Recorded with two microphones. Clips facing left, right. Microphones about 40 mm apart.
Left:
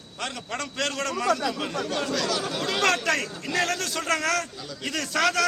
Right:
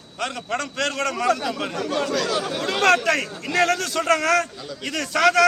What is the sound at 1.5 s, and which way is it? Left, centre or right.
Speech, centre.